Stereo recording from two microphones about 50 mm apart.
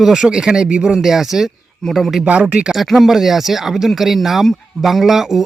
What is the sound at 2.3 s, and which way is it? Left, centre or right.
Speech, right.